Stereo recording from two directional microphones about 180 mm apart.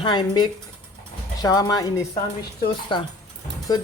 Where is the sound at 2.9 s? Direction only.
25° left (ahead or behind).